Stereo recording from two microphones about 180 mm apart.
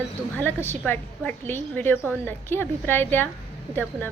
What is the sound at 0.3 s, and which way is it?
A woman's voice, 10° left (ahead or behind).